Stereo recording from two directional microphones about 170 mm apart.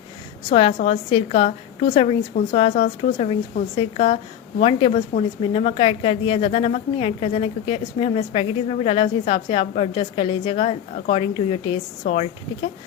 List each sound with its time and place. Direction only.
0.8 s a woman's voice: 45° left (ahead or behind)